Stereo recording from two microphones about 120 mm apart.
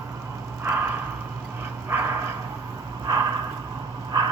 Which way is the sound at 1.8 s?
20° right (ahead or behind).